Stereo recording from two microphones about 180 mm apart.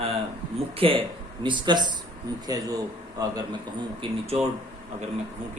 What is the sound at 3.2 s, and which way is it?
A man's voice, 25° right (ahead or behind).